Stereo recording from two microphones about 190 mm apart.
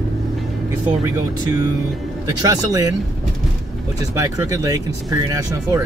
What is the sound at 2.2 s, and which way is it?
Speech, 20° right (ahead or behind).